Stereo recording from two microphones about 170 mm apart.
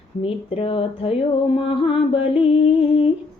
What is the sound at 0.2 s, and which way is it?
Speech, 35° left (ahead or behind).